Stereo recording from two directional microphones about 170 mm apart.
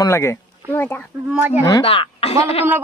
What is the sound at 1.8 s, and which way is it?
Speech, 35° left (ahead or behind).